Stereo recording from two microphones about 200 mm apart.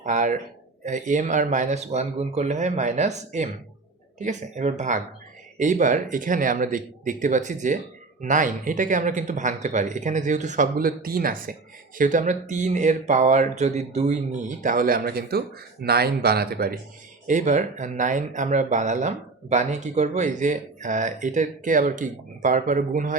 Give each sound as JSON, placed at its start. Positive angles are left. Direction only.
{"t": 0.0, "sound": "speech", "side_deg": -40}
{"t": 17.2, "sound": "speech", "side_deg": -40}